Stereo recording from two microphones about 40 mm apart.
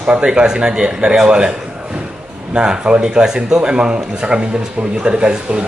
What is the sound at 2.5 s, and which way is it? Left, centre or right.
A man's voice, right.